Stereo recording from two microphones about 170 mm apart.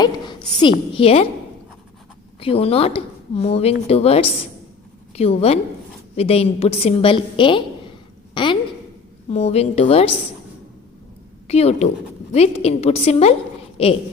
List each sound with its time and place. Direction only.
0.0 s a woman's voice: 25° left (ahead or behind)
2.4 s a woman's voice: 35° left (ahead or behind)
9.3 s a woman's voice: 40° left (ahead or behind)
11.4 s a woman's voice: 40° left (ahead or behind)